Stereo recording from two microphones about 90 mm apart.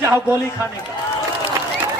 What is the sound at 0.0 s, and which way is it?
Speech, 30° right (ahead or behind).